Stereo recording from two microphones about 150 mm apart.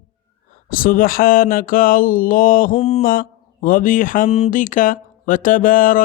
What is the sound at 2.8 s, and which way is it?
Speech, 45° left (ahead or behind).